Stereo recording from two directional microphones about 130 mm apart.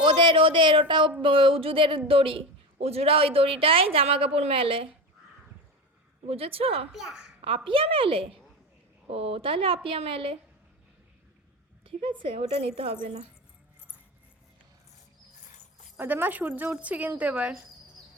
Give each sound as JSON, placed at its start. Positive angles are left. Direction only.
{"t": 0.0, "sound": "a woman's voice", "side_deg": -40}
{"t": 6.2, "sound": "a woman's voice", "side_deg": -45}
{"t": 6.9, "sound": "a child's voice", "side_deg": -5}
{"t": 7.4, "sound": "a woman's voice", "side_deg": -40}
{"t": 12.2, "sound": "a woman's voice", "side_deg": -45}
{"t": 16.0, "sound": "speech", "side_deg": -15}